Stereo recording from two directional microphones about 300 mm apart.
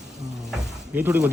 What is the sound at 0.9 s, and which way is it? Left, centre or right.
Speech, centre.